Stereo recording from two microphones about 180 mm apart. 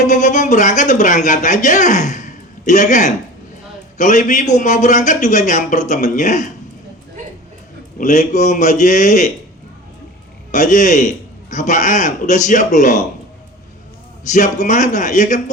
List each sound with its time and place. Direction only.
0.0 s speech: 40° left (ahead or behind)
7.9 s speech: 40° left (ahead or behind)
10.5 s speech: 45° left (ahead or behind)
14.3 s speech: 45° left (ahead or behind)